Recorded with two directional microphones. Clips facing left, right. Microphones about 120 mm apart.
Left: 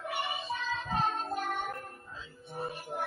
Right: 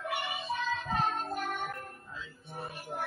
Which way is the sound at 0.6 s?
30° left (ahead or behind).